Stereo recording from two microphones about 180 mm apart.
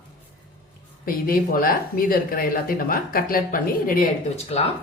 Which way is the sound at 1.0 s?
50° left (ahead or behind).